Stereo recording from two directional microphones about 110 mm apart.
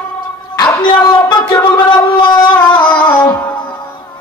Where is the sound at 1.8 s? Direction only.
45° left (ahead or behind).